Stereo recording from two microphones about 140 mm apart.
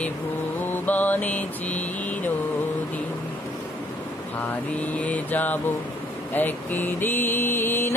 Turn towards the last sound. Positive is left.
turn(degrees=15)  # may be behind; listen again after turning